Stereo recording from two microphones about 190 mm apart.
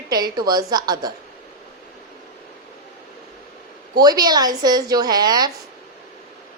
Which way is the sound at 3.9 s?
20° right (ahead or behind).